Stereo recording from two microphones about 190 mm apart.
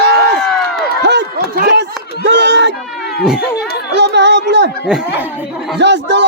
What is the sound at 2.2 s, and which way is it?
Run, 65° right (ahead or behind).